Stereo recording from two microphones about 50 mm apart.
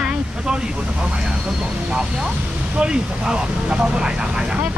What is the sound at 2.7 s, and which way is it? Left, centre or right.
Speech, centre.